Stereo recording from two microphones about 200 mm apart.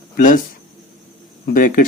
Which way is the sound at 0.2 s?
40° left (ahead or behind).